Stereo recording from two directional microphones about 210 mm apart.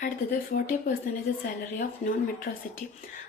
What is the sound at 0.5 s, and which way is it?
Speech, 45° left (ahead or behind).